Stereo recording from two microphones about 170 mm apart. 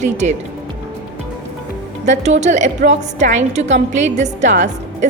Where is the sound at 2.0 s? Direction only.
40° right (ahead or behind).